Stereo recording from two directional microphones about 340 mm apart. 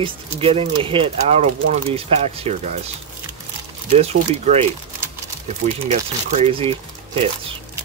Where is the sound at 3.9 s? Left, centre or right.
Centre.